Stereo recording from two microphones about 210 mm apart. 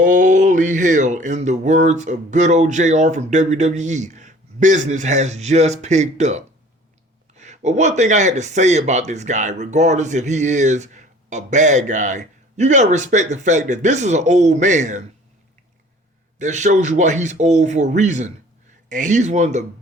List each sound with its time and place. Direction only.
0.0 s speech: 40° right (ahead or behind)
16.4 s speech: 35° right (ahead or behind)